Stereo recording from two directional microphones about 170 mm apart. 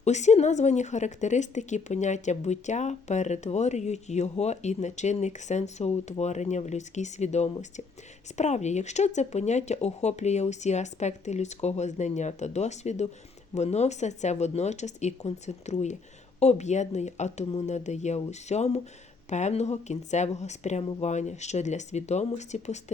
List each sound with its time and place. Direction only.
0.0 s speech: 40° left (ahead or behind)